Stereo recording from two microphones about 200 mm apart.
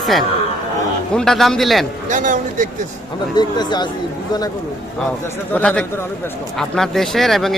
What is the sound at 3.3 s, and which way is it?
Speech, 20° left (ahead or behind).